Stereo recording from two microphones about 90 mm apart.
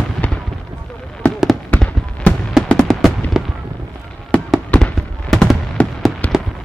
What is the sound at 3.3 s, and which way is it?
Fireworks, centre (ahead or behind).